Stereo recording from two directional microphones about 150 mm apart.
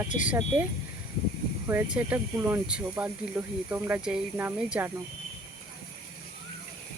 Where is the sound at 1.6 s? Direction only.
10° right (ahead or behind).